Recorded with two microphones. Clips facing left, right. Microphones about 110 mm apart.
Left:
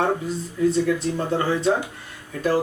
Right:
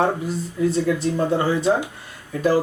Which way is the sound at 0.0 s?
5° right (ahead or behind).